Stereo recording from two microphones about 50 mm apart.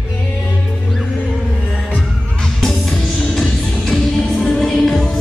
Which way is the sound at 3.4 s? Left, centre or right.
Centre.